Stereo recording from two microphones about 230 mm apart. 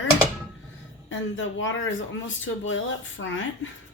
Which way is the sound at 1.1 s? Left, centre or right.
Left.